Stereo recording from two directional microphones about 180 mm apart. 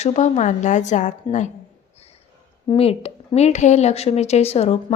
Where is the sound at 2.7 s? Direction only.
35° left (ahead or behind).